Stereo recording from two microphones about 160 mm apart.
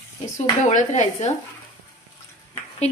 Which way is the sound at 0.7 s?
50° left (ahead or behind).